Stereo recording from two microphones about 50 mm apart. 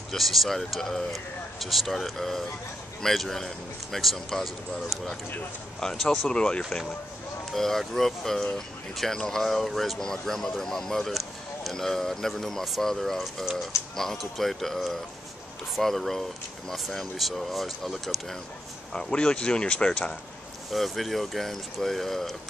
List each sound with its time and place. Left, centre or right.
0.1 s speech: centre
6.3 s speech: centre
7.5 s speech: centre
13.2 s speech: centre
18.9 s speech: centre
20.7 s speech: centre